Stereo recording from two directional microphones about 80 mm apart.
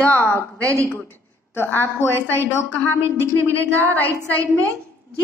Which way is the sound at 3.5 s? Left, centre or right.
Left.